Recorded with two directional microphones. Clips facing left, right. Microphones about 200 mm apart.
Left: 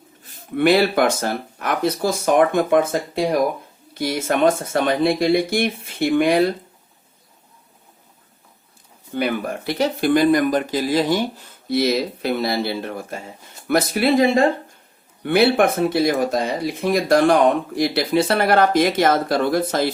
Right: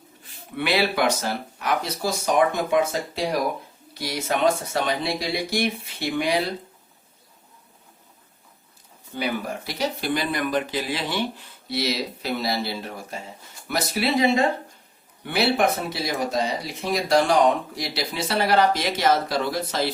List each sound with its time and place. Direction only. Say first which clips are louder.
0.5 s speech: left 7 dB; 45° left (ahead or behind)
9.1 s speech: left 5 dB; 55° left (ahead or behind)